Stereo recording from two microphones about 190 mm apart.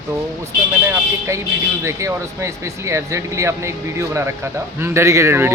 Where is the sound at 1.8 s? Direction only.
15° right (ahead or behind).